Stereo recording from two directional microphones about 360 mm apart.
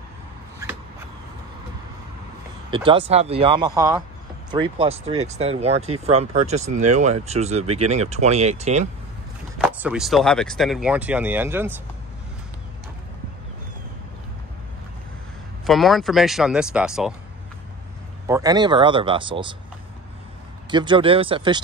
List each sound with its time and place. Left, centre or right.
2.7 s speech: centre
9.6 s speech: centre
15.6 s speech: centre
18.2 s speech: centre
20.7 s speech: centre